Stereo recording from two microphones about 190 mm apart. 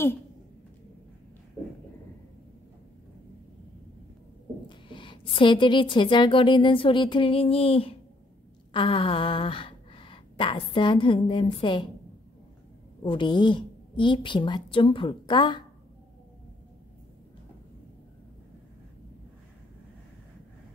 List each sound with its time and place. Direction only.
4.6 s a woman's voice: 25° left (ahead or behind)
13.0 s a woman's voice: 25° left (ahead or behind)